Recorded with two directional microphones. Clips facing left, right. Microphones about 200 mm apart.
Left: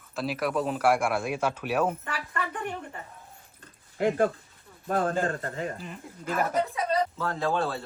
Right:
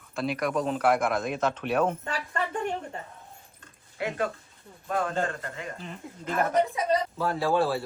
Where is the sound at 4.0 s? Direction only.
45° left (ahead or behind).